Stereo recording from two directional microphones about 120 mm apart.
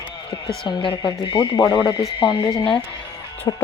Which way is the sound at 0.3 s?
40° left (ahead or behind).